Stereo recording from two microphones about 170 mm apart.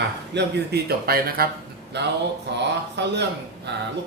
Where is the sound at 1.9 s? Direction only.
85° right.